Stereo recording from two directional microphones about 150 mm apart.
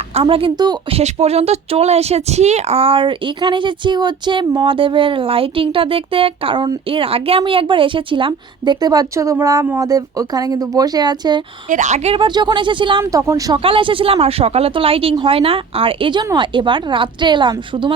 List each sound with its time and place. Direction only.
0.1 s a woman's voice: 40° right (ahead or behind)
0.9 s a woman's voice: 45° right (ahead or behind)
11.7 s a woman's voice: 55° right (ahead or behind); by 13.1 s 35° right (ahead or behind)
13.1 s speech: 20° right (ahead or behind)
13.6 s a woman's voice: 35° right (ahead or behind)